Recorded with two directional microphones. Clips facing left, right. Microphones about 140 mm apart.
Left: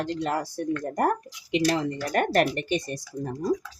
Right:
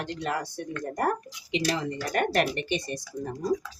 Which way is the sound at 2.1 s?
45° left (ahead or behind).